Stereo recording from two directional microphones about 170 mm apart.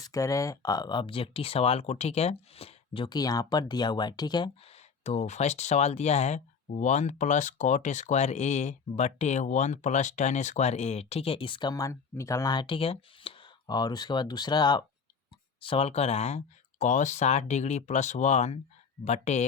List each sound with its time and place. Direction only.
0.0 s speech: 20° left (ahead or behind); by 19.5 s 40° left (ahead or behind)